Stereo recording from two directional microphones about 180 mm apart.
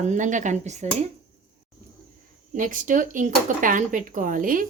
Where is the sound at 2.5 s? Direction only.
45° right (ahead or behind).